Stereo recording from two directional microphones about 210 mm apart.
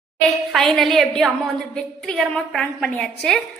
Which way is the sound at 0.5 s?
Centre (ahead or behind).